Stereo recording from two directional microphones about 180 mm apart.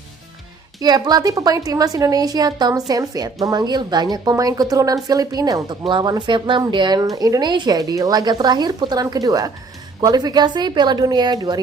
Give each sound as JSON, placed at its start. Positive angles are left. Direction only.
{"t": 0.8, "sound": "speech", "side_deg": -20}